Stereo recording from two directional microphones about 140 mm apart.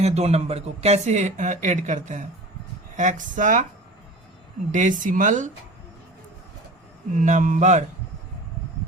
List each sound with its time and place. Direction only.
0.0 s speech: 50° right (ahead or behind); by 3.7 s 65° right (ahead or behind)
4.7 s speech: 65° right (ahead or behind)
7.2 s speech: 60° right (ahead or behind)